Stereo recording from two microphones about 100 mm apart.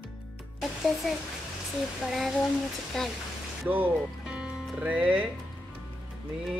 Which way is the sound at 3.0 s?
5° left (ahead or behind).